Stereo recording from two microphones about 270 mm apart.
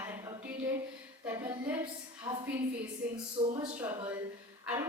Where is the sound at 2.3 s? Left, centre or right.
Centre.